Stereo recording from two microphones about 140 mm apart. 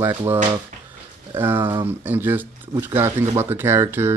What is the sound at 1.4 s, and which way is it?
Speech, 15° right (ahead or behind).